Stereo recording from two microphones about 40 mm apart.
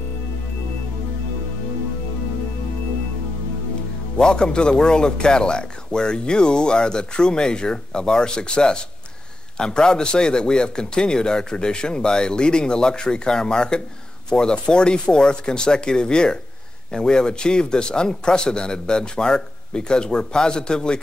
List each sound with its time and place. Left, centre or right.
4.2 s speech: left